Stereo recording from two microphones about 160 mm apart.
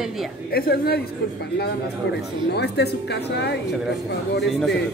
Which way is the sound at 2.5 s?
90° left.